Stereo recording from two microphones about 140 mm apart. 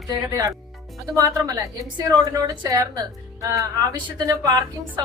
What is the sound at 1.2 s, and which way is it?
A woman's voice, 25° right (ahead or behind).